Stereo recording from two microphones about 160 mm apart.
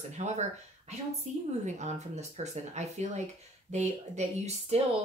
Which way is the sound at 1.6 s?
45° right (ahead or behind).